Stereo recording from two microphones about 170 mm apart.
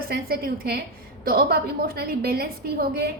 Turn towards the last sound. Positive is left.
turn(degrees=-65)  # may be behind; listen again after turning